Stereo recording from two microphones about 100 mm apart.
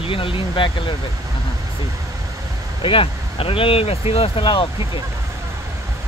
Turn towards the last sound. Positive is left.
turn(degrees=55)  # may be behind; listen again after turning